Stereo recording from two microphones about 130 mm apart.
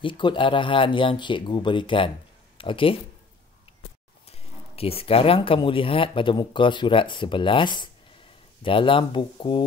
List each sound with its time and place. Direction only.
0.0 s speech: 40° left (ahead or behind)
4.3 s speech: 50° left (ahead or behind)